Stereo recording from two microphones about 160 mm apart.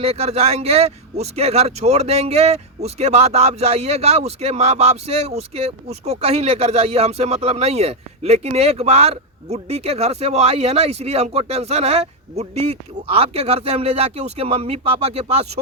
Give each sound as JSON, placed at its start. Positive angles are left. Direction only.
{"t": 0.0, "sound": "speech", "side_deg": -40}